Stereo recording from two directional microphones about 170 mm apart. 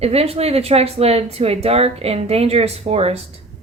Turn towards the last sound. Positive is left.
turn(degrees=-35)  # may be behind; listen again after turning